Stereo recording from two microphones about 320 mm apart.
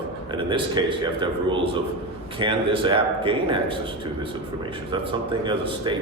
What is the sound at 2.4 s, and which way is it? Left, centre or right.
A man's voice, centre.